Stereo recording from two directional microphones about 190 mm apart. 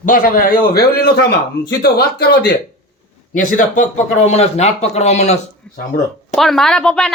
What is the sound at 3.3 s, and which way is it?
A man's voice, 45° left (ahead or behind).